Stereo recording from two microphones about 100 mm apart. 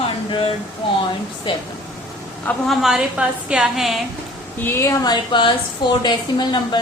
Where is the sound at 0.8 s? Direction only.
55° left (ahead or behind).